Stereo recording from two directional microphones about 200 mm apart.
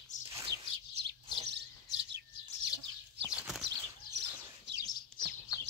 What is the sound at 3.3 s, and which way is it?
Bird flight, 5° right (ahead or behind).